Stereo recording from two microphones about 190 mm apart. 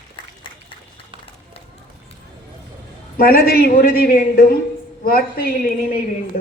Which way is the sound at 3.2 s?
50° left (ahead or behind).